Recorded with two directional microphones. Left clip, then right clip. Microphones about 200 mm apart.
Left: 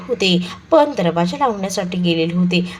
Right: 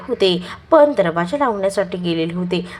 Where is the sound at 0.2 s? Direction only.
15° right (ahead or behind).